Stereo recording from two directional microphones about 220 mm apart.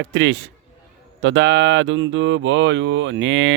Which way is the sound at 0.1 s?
55° right (ahead or behind).